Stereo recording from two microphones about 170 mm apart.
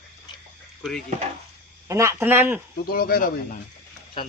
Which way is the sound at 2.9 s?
60° left (ahead or behind).